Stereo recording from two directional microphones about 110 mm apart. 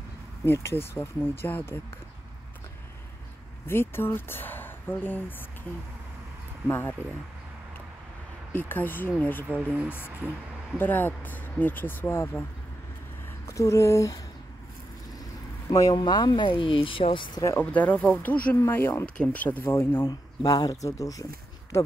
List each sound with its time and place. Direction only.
0.5 s speech: 25° left (ahead or behind)
3.6 s speech: 20° left (ahead or behind)
6.7 s speech: 20° left (ahead or behind)
8.5 s speech: 20° left (ahead or behind)
13.5 s speech: 30° left (ahead or behind)
15.7 s speech: 35° left (ahead or behind); by 17.3 s 50° left (ahead or behind)
17.6 s speech: 15° left (ahead or behind)
19.0 s speech: 10° left (ahead or behind)
20.1 s speech: 35° left (ahead or behind)